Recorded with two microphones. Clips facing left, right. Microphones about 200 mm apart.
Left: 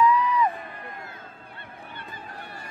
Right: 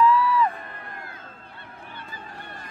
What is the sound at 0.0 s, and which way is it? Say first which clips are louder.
Crowd: right 2 dB; 15° left (ahead or behind).